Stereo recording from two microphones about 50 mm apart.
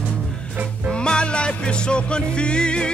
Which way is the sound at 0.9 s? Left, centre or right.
Centre.